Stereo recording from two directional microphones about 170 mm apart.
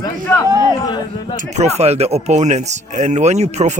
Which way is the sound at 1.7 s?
40° right (ahead or behind).